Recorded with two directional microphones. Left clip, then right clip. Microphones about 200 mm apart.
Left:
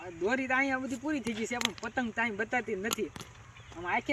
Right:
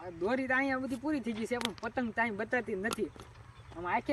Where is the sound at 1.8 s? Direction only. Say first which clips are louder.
Left 1 dB; 10° right (ahead or behind).